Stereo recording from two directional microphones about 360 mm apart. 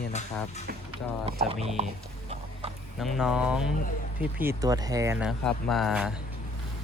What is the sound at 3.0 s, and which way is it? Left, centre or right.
Speech, centre.